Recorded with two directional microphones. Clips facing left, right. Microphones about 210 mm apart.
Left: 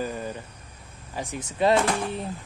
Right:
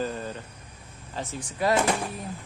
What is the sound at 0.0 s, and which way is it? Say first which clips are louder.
Cricket: even; 10° left (ahead or behind).